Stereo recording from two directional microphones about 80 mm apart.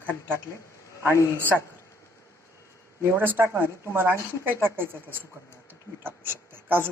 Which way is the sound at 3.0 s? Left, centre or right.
Right.